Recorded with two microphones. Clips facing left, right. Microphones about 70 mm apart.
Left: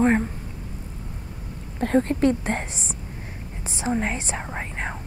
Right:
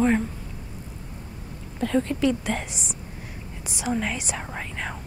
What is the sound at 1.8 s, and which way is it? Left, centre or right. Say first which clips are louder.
A woman's voice: left 3 dB; left.